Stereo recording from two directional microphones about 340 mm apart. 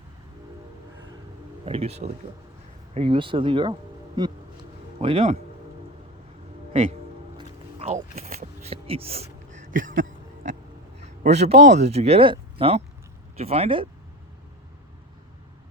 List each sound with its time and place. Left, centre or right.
1.6 s speech: centre
7.3 s music: centre
11.0 s speech: centre